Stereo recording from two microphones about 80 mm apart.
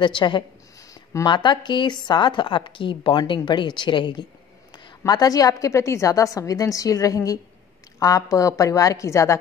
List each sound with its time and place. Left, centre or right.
0.0 s a woman's voice: left
5.0 s a woman's voice: left